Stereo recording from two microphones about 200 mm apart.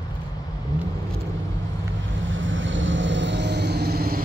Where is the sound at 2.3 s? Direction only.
70° right (ahead or behind); by 4.2 s 50° right (ahead or behind).